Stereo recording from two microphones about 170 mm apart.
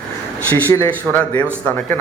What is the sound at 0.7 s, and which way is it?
Speech, 10° left (ahead or behind).